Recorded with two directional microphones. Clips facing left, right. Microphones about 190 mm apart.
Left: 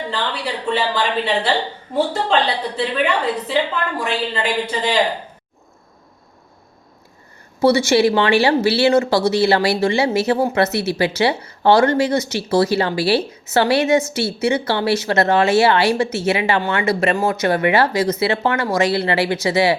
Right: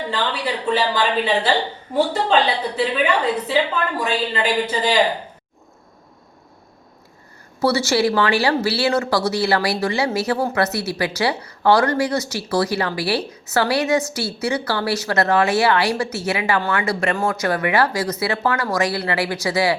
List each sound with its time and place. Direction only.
0.4 s a woman's voice: 5° right (ahead or behind)
7.6 s a woman's voice: 20° left (ahead or behind)